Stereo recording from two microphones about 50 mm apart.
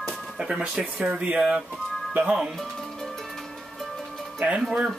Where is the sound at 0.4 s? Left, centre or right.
Centre.